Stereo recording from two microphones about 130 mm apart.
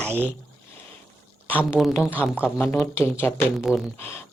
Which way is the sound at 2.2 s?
10° right (ahead or behind).